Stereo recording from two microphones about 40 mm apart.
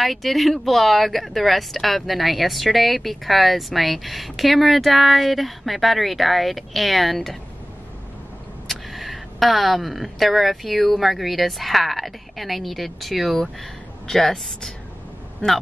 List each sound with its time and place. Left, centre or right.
0.0 s speech: centre
8.6 s speech: centre
15.4 s speech: centre